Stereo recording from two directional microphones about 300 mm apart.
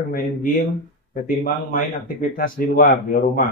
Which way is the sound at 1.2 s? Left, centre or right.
Left.